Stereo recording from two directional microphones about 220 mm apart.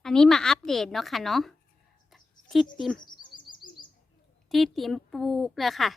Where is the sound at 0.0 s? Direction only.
5° left (ahead or behind).